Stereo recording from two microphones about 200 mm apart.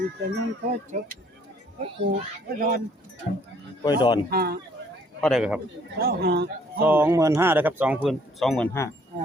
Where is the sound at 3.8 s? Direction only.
20° left (ahead or behind).